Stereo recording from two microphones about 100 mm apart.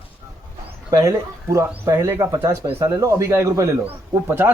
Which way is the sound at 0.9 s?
35° right (ahead or behind).